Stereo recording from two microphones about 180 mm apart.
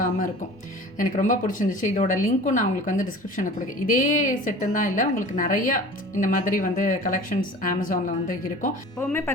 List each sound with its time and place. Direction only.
0.9 s a woman's voice: 45° left (ahead or behind)
9.0 s speech: 15° left (ahead or behind)